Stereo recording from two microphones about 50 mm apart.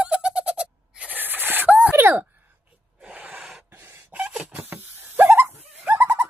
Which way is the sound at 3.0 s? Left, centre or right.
Centre.